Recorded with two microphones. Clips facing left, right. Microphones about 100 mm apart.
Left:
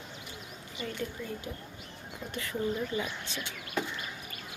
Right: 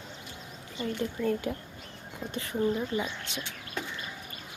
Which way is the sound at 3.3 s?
20° right (ahead or behind).